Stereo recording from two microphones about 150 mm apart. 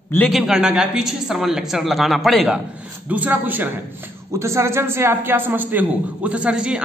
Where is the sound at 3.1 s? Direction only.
10° right (ahead or behind).